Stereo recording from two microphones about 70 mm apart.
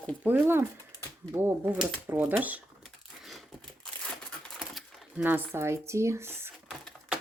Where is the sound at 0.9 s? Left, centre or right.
Left.